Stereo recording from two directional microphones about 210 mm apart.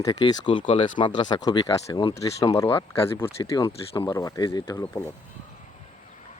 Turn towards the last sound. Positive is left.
turn(degrees=20)  # may be behind; listen again after turning